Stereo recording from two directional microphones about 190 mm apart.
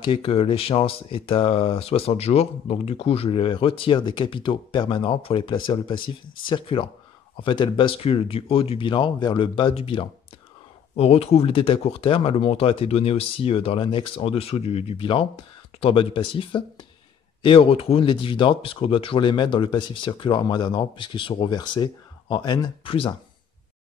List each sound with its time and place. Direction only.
0.0 s speech: 30° left (ahead or behind)